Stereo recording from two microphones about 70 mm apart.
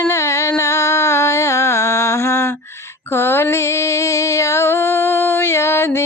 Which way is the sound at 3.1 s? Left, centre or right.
Left.